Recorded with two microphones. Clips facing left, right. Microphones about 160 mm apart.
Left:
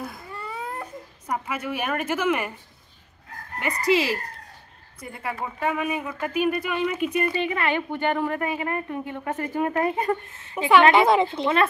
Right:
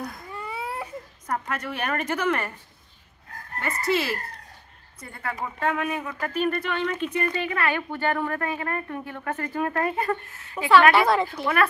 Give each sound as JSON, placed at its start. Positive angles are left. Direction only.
{"t": 0.4, "sound": "baby cry", "side_deg": -10}
{"t": 1.2, "sound": "speech", "side_deg": 10}
{"t": 3.5, "sound": "speech", "side_deg": 15}
{"t": 5.0, "sound": "speech", "side_deg": 10}